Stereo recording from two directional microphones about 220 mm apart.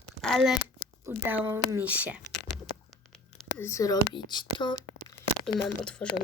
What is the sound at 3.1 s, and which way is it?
Speech, 5° left (ahead or behind).